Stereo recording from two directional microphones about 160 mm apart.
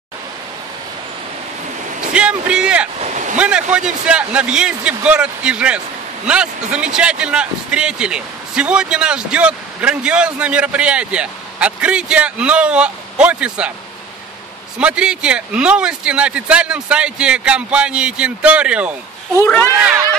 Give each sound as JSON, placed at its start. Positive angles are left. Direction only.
{"t": 2.1, "sound": "speech", "side_deg": -5}
{"t": 3.0, "sound": "a sound", "side_deg": -45}
{"t": 3.3, "sound": "speech", "side_deg": -5}
{"t": 14.8, "sound": "speech", "side_deg": -5}